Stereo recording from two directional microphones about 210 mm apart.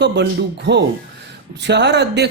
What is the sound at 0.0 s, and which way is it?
Speech, 55° right (ahead or behind).